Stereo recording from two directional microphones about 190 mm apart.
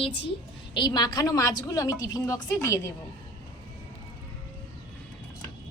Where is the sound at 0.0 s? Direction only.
30° left (ahead or behind).